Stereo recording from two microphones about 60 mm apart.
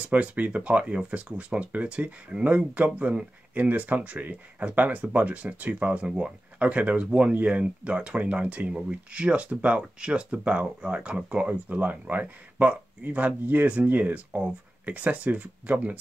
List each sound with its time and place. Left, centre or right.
0.0 s speech: right